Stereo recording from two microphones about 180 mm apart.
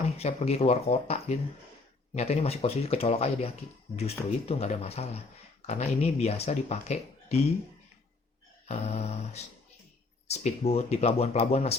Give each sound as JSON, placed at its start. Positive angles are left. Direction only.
{"t": 0.2, "sound": "speech", "side_deg": 35}
{"t": 8.6, "sound": "speech", "side_deg": 35}